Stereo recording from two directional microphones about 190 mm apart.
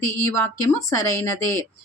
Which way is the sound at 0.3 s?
15° left (ahead or behind).